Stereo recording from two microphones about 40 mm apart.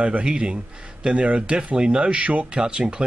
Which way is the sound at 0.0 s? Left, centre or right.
Right.